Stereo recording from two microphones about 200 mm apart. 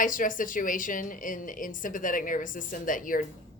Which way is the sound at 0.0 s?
40° left (ahead or behind).